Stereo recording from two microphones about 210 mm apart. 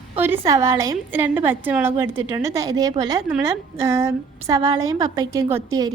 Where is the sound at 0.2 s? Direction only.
10° right (ahead or behind).